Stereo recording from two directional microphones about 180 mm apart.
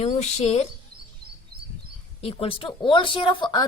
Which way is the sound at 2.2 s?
35° left (ahead or behind).